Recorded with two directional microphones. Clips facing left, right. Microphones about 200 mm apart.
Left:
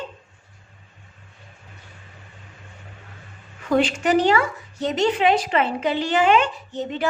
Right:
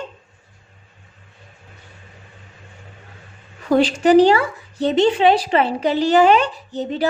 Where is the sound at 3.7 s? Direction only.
35° right (ahead or behind).